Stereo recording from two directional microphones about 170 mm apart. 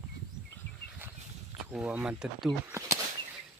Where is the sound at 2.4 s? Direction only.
20° right (ahead or behind).